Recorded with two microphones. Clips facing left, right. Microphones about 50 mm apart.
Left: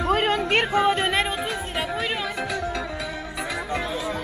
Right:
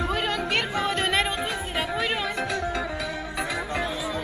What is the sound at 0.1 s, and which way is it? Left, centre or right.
Music, left.